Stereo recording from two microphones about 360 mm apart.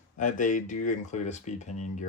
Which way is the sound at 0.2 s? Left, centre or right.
Left.